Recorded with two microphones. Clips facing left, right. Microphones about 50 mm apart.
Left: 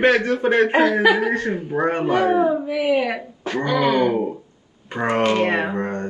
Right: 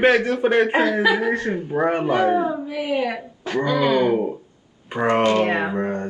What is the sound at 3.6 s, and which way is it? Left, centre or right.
Groan, left.